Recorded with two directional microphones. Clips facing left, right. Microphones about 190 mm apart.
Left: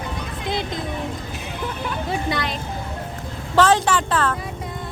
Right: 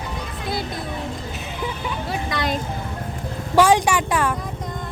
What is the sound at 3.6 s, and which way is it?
Speech, 10° right (ahead or behind).